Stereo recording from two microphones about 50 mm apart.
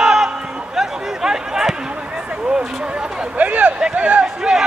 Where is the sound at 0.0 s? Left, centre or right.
Centre.